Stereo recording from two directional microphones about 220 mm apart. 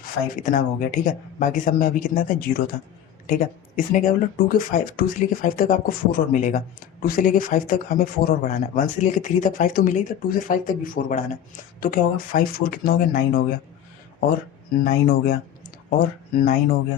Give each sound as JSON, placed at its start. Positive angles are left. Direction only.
{"t": 0.0, "sound": "speech", "side_deg": 40}
{"t": 14.8, "sound": "speech", "side_deg": 45}